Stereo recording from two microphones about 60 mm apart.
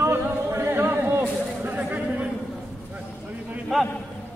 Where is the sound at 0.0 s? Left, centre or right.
Right.